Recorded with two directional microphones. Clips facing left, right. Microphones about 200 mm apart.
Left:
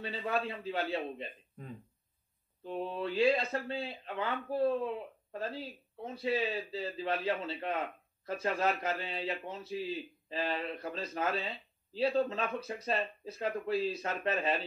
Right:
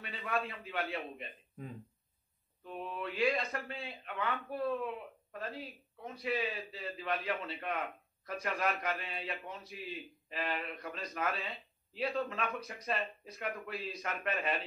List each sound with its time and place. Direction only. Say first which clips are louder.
0.0 s a man's voice: left 3 dB; 30° left (ahead or behind)
2.6 s a man's voice: left 5 dB; 30° left (ahead or behind)